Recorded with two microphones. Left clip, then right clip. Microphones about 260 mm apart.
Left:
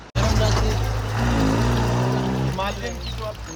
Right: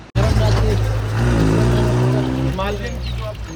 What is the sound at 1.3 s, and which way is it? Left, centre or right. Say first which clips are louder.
Vehicle: right 4 dB; left.